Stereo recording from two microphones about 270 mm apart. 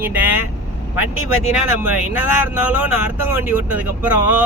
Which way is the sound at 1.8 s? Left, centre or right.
Centre.